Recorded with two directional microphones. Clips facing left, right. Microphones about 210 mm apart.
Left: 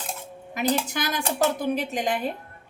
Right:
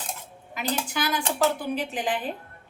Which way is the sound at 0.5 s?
40° left (ahead or behind).